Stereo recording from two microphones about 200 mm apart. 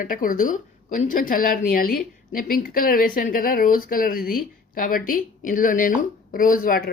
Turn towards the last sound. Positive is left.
turn(degrees=45)  # may be behind; listen again after turning